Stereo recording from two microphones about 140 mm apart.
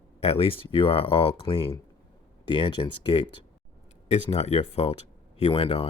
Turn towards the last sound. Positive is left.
turn(degrees=45)  # may be behind; listen again after turning